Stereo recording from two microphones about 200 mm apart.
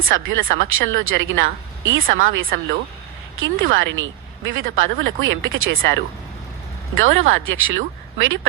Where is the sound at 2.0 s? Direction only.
45° right (ahead or behind).